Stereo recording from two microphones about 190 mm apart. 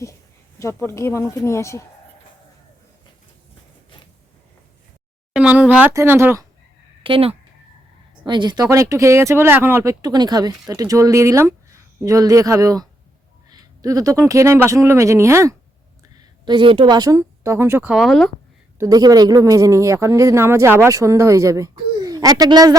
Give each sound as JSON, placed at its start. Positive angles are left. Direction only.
{"t": 0.6, "sound": "speech", "side_deg": 15}
{"t": 5.3, "sound": "a sound", "side_deg": -5}
{"t": 5.6, "sound": "speech", "side_deg": -10}
{"t": 7.0, "sound": "speech", "side_deg": -30}
{"t": 16.5, "sound": "speech", "side_deg": -25}
{"t": 18.8, "sound": "speech", "side_deg": -20}